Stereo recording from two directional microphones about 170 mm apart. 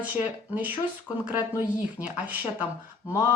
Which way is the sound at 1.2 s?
10° right (ahead or behind).